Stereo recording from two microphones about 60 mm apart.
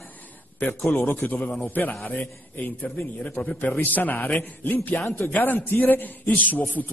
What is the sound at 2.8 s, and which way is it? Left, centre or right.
A man's voice, centre.